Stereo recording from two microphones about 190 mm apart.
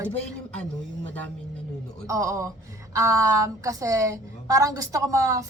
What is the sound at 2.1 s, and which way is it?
Speech, 15° right (ahead or behind).